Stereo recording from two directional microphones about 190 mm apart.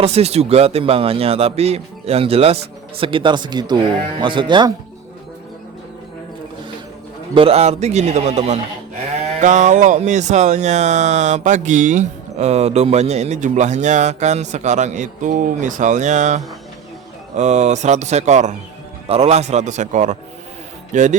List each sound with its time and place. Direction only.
0.0 s speech: 35° right (ahead or behind)
7.3 s speech: 30° right (ahead or behind)